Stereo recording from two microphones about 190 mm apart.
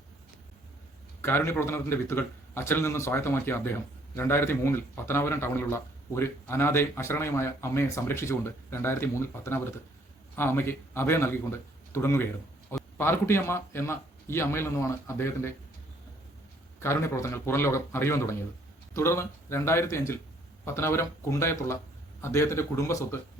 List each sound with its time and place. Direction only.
1.2 s a man's voice: 10° left (ahead or behind)
16.8 s a man's voice: 15° left (ahead or behind)